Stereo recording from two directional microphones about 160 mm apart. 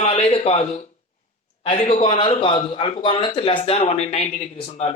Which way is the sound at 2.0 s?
30° left (ahead or behind).